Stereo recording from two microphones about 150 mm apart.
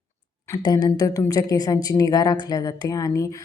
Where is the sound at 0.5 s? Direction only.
30° left (ahead or behind).